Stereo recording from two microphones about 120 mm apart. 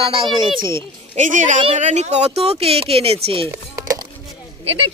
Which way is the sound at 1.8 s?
70° right (ahead or behind).